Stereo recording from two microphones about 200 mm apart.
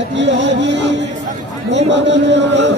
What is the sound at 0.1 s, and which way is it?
Music, 60° right (ahead or behind).